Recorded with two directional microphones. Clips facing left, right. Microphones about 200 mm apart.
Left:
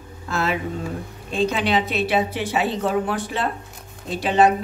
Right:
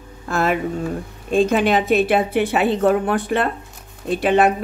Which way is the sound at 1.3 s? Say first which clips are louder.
Right 5 dB; 50° right (ahead or behind).